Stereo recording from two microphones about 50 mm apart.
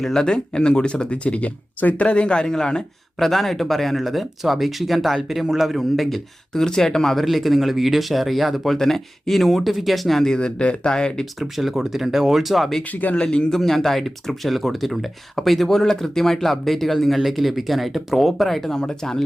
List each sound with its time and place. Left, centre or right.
0.0 s speech: centre
10.3 s speech: left
11.3 s speech: centre
12.8 s speech: left
13.2 s speech: centre
13.6 s speech: centre